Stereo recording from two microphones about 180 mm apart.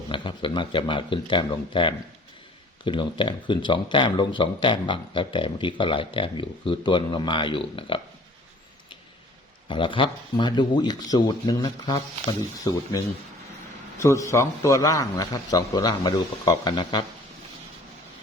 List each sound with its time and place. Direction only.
0.1 s speech: 30° left (ahead or behind)
9.6 s speech: 25° left (ahead or behind)
14.0 s speech: 15° left (ahead or behind)